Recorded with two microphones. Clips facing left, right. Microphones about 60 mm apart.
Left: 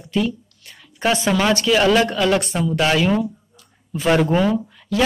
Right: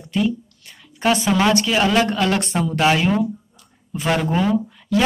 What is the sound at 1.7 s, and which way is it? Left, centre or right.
Speech, centre.